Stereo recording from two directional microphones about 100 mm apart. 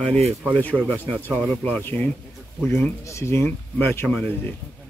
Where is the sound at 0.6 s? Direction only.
15° left (ahead or behind).